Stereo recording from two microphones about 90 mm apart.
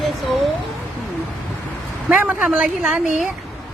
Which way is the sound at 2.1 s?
20° right (ahead or behind).